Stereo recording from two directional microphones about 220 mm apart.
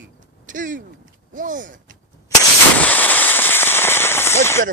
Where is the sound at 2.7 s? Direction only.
5° left (ahead or behind).